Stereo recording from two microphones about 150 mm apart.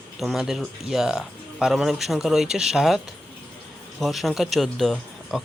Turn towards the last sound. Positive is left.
turn(degrees=0)  # may be behind; listen again after turning